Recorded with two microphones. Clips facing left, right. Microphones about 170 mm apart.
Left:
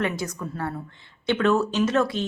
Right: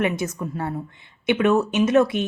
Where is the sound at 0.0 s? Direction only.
20° right (ahead or behind).